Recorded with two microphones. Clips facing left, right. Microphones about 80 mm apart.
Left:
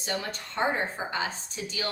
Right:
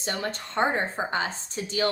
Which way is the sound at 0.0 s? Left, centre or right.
Right.